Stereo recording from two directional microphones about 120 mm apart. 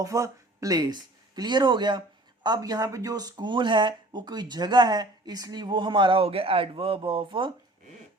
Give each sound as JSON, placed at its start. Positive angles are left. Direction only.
{"t": 0.0, "sound": "speech", "side_deg": -30}